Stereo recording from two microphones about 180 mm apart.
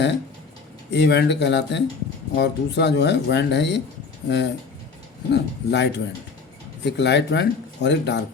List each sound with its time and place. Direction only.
0.9 s speech: 70° left (ahead or behind)